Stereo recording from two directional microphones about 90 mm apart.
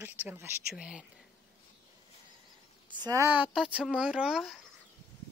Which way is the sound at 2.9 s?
55° right (ahead or behind).